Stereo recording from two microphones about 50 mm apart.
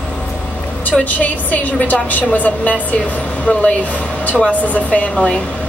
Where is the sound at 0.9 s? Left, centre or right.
Left.